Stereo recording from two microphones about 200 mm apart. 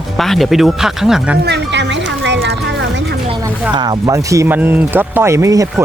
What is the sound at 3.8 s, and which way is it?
Speech, 20° right (ahead or behind).